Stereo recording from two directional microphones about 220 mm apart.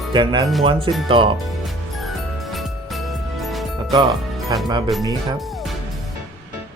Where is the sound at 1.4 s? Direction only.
Centre (ahead or behind).